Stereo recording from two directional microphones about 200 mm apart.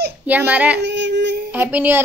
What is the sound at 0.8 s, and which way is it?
Child singing, 60° right (ahead or behind).